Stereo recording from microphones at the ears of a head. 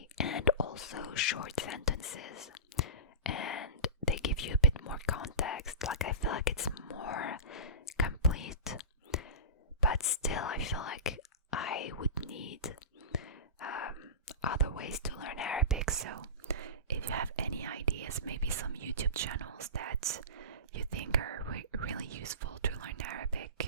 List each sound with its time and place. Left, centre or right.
0.2 s whispering: left
15.8 s whispering: right